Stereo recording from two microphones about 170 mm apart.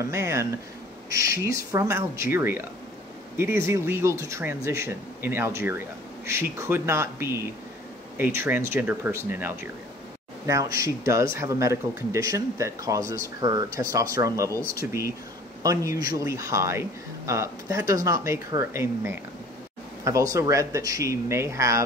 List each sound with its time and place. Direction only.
0.0 s speech: 15° right (ahead or behind)
3.6 s speech: 15° right (ahead or behind)